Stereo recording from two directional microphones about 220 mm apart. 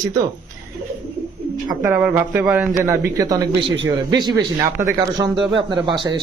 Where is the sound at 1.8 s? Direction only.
5° right (ahead or behind).